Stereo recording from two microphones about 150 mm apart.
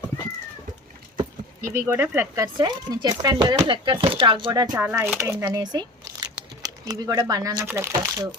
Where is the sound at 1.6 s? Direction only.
60° right (ahead or behind).